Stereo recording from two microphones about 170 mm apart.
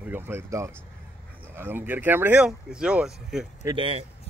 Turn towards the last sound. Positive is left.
turn(degrees=-20)  # may be behind; listen again after turning